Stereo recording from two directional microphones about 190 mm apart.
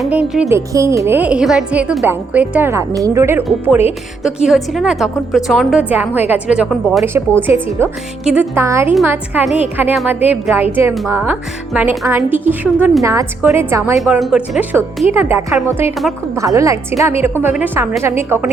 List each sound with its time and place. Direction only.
0.0 s a woman's voice: 5° right (ahead or behind)
14.0 s a woman's voice: centre (ahead or behind)
15.5 s speech: centre (ahead or behind)
16.3 s a woman's voice: 15° right (ahead or behind)